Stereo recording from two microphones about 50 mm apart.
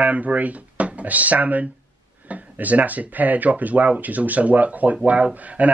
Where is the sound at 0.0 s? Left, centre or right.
Right.